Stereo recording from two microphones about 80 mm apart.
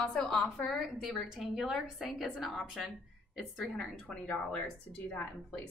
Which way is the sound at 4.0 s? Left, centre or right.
Centre.